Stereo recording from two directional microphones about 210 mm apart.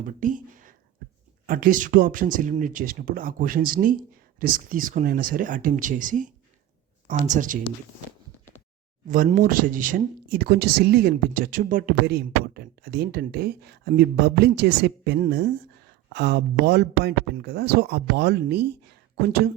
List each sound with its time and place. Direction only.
0.0 s speech: 40° right (ahead or behind)
9.0 s speech: 40° right (ahead or behind)